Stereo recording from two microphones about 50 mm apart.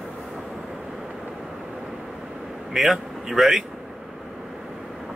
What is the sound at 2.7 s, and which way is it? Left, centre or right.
Speech, centre.